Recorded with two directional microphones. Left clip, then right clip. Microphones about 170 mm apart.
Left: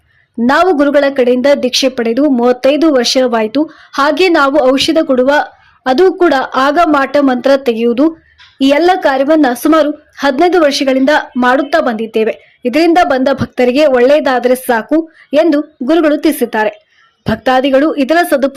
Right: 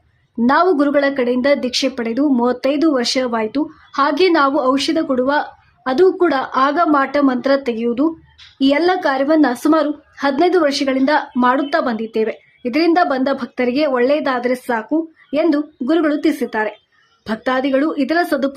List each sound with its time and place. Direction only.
0.4 s a woman's voice: 20° left (ahead or behind)